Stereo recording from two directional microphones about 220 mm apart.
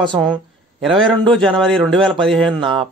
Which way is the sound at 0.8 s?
Centre (ahead or behind).